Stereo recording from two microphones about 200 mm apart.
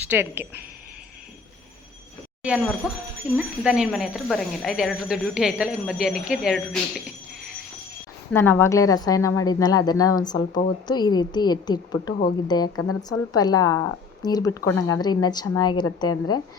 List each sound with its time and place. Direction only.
0.1 s speech: 10° right (ahead or behind)
2.4 s speech: 5° right (ahead or behind)
8.3 s speech: 10° left (ahead or behind)